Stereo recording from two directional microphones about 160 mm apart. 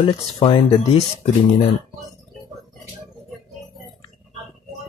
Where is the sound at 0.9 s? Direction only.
40° left (ahead or behind).